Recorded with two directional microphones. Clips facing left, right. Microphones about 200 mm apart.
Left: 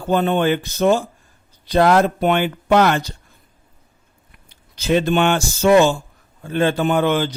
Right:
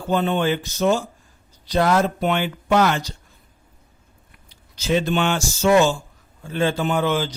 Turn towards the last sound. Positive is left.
turn(degrees=55)  # may be behind; listen again after turning